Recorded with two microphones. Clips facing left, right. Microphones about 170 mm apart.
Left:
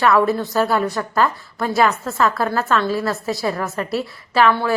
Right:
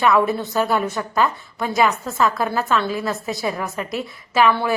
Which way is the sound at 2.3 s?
20° right (ahead or behind).